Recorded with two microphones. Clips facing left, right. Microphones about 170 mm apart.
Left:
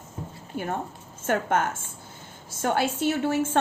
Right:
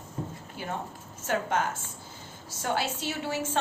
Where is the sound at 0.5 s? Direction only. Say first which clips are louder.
Left 6 dB; 55° left (ahead or behind).